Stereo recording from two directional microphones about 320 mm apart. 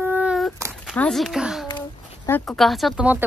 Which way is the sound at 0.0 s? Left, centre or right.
Centre.